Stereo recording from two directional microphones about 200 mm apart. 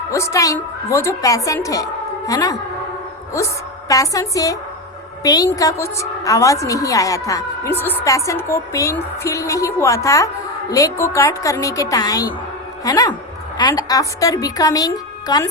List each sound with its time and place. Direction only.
0.1 s a woman's voice: 15° left (ahead or behind)